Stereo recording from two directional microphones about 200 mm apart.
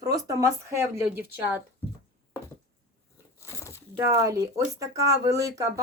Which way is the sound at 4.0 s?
15° right (ahead or behind).